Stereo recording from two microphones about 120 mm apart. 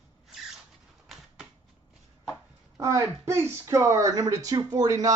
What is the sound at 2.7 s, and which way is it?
Speech, 25° right (ahead or behind).